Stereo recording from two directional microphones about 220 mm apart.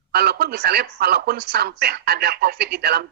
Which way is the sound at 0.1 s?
45° right (ahead or behind).